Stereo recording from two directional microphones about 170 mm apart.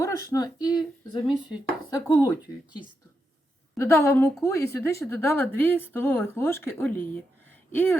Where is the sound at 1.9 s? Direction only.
15° left (ahead or behind).